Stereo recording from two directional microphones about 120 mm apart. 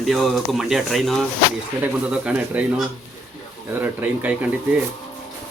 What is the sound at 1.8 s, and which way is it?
Speech, 15° right (ahead or behind).